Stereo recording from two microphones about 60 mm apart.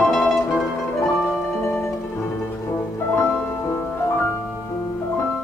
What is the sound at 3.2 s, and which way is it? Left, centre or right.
Music, left.